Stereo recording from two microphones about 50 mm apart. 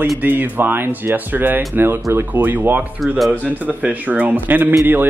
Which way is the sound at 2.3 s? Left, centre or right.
Right.